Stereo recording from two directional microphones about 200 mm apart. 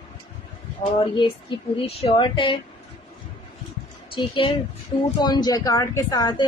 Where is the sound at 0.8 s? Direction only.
25° left (ahead or behind).